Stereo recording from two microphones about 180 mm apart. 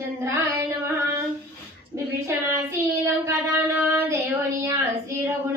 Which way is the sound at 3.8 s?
10° right (ahead or behind).